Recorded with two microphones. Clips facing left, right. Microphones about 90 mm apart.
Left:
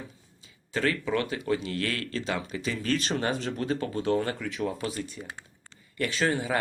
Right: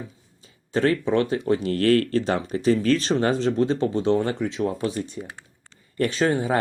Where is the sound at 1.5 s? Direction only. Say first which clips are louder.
Right 11 dB; 45° right (ahead or behind).